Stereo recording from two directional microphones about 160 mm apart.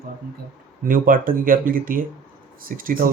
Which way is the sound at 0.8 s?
60° right (ahead or behind).